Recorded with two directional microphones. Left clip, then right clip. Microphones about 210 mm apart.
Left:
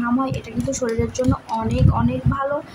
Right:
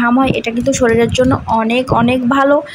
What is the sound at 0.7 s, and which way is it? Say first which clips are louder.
Speech: right 11 dB; 25° right (ahead or behind).